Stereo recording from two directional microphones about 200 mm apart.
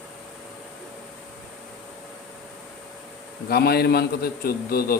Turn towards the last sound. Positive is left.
turn(degrees=50)  # may be behind; listen again after turning